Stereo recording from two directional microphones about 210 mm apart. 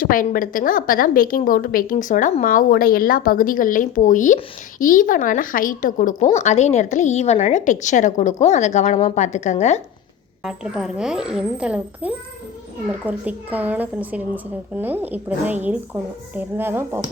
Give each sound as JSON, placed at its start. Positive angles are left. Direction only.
{"t": 0.0, "sound": "a woman's voice", "side_deg": 40}
{"t": 10.4, "sound": "a woman's voice", "side_deg": -5}